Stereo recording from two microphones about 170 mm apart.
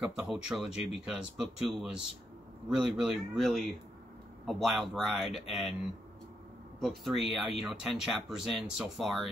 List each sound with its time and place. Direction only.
0.0 s speech: 5° right (ahead or behind)
0.7 s speech: 35° left (ahead or behind)
1.0 s speech: 5° right (ahead or behind)
6.8 s speech: centre (ahead or behind)